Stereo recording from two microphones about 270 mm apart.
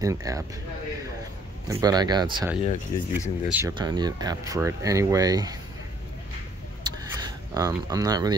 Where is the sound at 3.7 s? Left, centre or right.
Centre.